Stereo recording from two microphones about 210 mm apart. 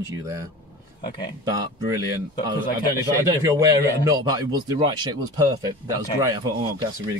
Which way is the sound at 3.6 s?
15° right (ahead or behind).